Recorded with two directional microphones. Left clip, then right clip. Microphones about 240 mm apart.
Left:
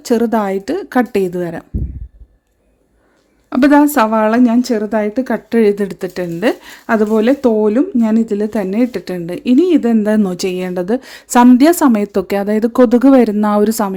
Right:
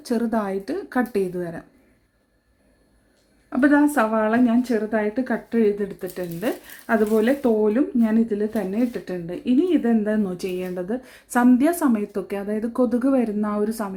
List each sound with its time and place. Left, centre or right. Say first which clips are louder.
0.0 s a woman's voice: left 10 dB; left
3.5 s a woman's voice: left 8 dB; left